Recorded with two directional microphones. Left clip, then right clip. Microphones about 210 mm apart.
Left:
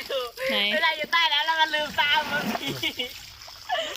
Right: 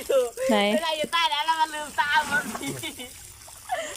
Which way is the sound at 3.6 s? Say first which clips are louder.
Left 2 dB; 5° left (ahead or behind).